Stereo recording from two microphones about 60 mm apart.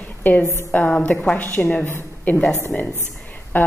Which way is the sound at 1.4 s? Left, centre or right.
Left.